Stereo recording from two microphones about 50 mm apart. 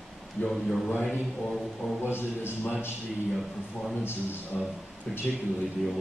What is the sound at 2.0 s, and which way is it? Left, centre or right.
Speech, left.